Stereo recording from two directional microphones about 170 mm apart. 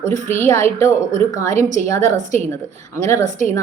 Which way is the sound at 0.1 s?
15° left (ahead or behind).